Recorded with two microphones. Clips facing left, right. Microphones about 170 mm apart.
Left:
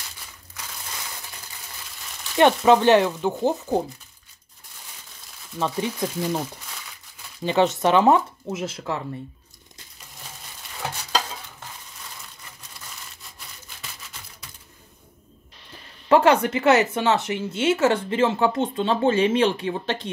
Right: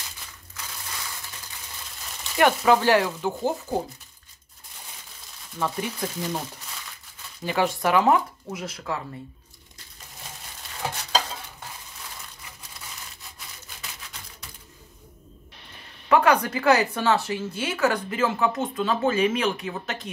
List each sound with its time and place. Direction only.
2.3 s a woman's voice: 25° left (ahead or behind)
5.6 s a woman's voice: 20° left (ahead or behind)
7.4 s a woman's voice: 20° left (ahead or behind)
16.1 s a woman's voice: 25° left (ahead or behind)